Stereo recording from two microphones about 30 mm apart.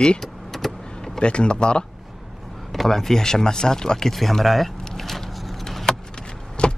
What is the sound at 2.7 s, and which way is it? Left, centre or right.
Speech, centre.